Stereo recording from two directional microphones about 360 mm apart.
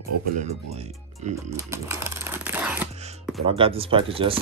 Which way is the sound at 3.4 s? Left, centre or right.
Centre.